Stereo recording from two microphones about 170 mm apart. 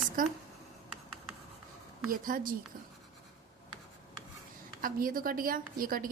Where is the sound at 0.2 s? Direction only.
50° right (ahead or behind).